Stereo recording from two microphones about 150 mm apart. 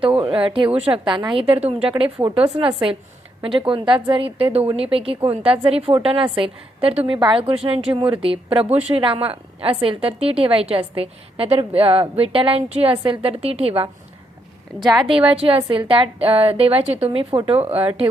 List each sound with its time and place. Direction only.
0.2 s a woman's voice: 35° right (ahead or behind)
3.7 s a woman's voice: 35° right (ahead or behind)
14.8 s a woman's voice: centre (ahead or behind)
15.4 s a woman's voice: 40° right (ahead or behind)